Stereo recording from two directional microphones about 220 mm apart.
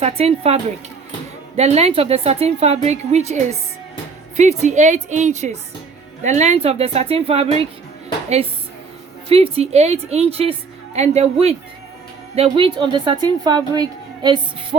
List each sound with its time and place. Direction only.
0.0 s a woman's voice: 25° right (ahead or behind)
9.3 s a woman's voice: 25° right (ahead or behind)